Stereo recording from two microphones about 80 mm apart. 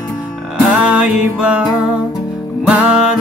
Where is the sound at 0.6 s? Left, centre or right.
Centre.